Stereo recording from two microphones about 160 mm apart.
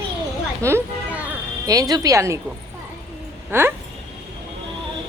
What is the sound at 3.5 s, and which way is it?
Speech, 15° right (ahead or behind).